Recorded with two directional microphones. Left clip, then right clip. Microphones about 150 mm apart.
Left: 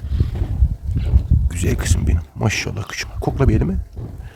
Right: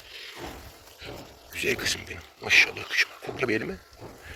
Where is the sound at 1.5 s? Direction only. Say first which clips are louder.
Left 1 dB; 50° left (ahead or behind).